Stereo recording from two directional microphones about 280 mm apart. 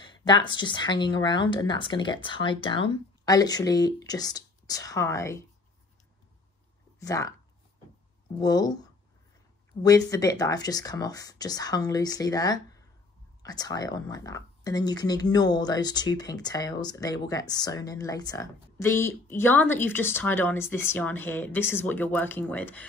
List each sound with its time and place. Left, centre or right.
0.0 s speech: centre
7.0 s speech: centre
8.4 s speech: centre
9.8 s speech: centre